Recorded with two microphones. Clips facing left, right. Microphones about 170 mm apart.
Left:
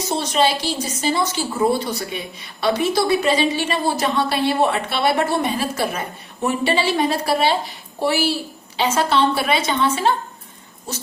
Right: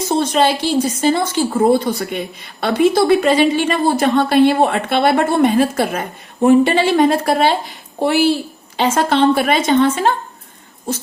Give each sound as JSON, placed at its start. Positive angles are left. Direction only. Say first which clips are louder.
{"t": 0.0, "sound": "a woman's voice", "louder": "right 4 dB", "side_deg": -55}